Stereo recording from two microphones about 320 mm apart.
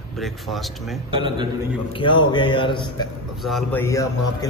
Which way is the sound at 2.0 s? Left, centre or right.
Centre.